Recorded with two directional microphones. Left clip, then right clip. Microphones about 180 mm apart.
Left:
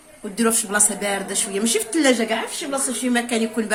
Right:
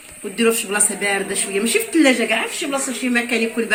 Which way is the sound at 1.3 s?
55° left (ahead or behind).